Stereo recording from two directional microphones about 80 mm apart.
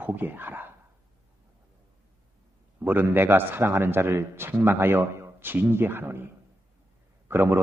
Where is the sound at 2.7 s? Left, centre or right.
Right.